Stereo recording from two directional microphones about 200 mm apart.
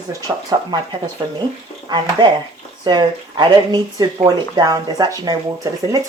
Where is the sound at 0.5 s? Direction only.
20° right (ahead or behind).